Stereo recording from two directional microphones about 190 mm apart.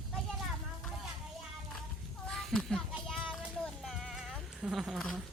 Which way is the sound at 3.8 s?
Centre (ahead or behind).